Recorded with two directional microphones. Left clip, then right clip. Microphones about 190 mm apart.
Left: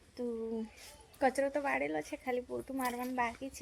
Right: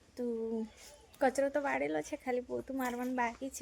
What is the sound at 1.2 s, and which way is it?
A woman's voice, 10° right (ahead or behind).